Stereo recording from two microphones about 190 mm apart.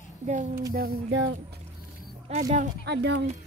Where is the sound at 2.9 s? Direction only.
65° right (ahead or behind).